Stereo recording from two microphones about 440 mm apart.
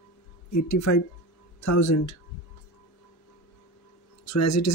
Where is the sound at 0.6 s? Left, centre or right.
Left.